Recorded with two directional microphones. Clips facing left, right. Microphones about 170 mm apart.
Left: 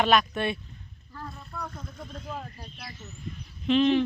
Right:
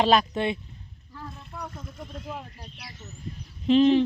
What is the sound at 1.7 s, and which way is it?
Speech, 5° right (ahead or behind).